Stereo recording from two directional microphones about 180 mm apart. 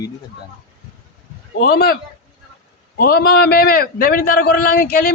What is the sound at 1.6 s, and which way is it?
Speech, 55° left (ahead or behind).